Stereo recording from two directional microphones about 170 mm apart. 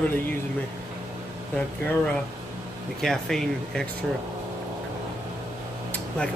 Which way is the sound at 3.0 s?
Centre (ahead or behind).